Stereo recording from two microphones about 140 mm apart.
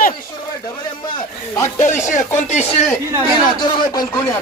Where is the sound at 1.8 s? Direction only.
60° left (ahead or behind).